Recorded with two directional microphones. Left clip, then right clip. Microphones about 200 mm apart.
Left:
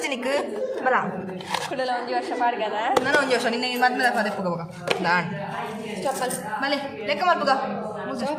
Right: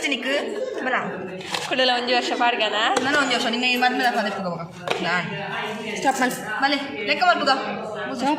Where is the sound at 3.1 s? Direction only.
40° left (ahead or behind).